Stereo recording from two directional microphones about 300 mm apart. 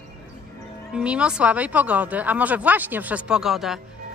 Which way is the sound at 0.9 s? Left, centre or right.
Centre.